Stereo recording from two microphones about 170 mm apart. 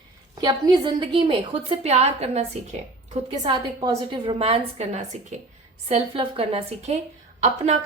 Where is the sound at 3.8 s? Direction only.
30° right (ahead or behind).